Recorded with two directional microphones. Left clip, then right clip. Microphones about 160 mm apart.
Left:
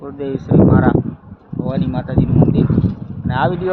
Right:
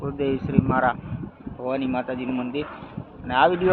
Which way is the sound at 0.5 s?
25° left (ahead or behind).